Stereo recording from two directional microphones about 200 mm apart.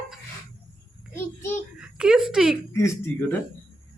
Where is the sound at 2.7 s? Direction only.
15° left (ahead or behind).